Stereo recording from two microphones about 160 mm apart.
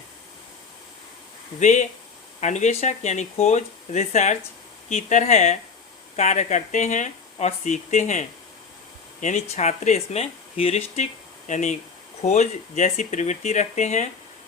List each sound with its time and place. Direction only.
1.5 s speech: 50° left (ahead or behind)